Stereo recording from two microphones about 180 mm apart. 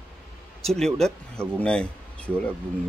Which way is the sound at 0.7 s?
5° left (ahead or behind).